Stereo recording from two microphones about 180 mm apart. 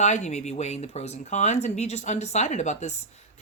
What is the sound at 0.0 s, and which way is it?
Speech, 40° left (ahead or behind).